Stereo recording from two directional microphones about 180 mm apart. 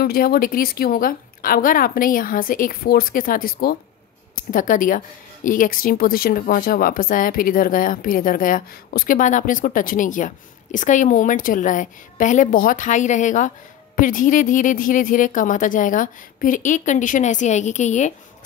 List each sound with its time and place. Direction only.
0.0 s speech: 60° left (ahead or behind); by 18.1 s 40° left (ahead or behind)